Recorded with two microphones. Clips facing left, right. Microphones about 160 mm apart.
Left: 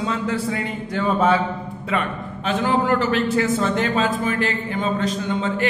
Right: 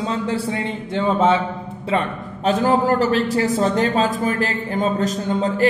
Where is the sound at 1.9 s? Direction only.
40° right (ahead or behind).